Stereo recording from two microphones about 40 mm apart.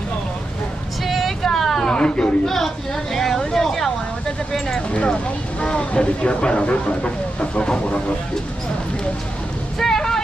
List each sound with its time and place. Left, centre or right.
1.0 s vehicle: centre
1.9 s chatter: left
2.4 s a sound: centre
4.5 s speech: centre
4.9 s speech: left
9.8 s vehicle: centre